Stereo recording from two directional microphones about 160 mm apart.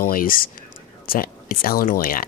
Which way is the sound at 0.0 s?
60° left (ahead or behind).